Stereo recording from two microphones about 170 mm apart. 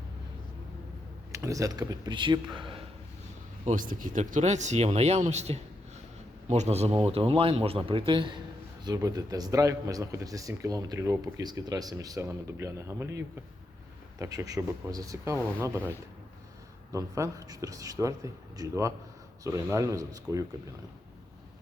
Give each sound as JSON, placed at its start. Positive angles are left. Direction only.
{"t": 1.3, "sound": "speech", "side_deg": -20}
{"t": 3.7, "sound": "a man's voice", "side_deg": -50}
{"t": 16.9, "sound": "speech", "side_deg": -20}